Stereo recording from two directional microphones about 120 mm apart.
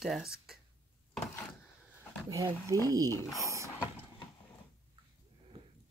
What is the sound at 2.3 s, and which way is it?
Speech, 30° right (ahead or behind).